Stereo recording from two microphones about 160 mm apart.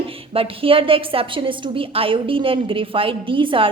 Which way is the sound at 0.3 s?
35° right (ahead or behind).